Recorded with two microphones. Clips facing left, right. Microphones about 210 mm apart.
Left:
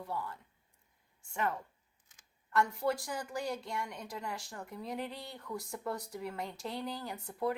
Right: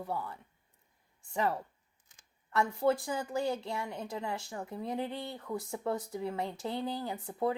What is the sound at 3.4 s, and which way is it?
A woman's voice, 25° right (ahead or behind).